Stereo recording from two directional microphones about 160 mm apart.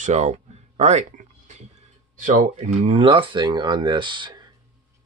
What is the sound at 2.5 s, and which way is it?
Speech, 40° right (ahead or behind).